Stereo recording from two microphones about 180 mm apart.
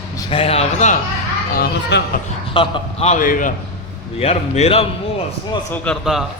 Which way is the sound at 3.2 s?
50° left (ahead or behind).